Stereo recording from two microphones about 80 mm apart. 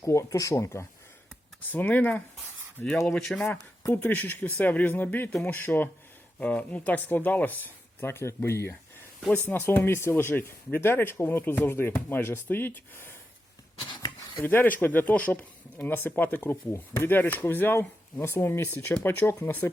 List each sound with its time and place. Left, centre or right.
0.0 s speech: left
1.6 s speech: left
3.1 s speech: centre
3.9 s speech: left
13.8 s a sound: left
14.4 s speech: left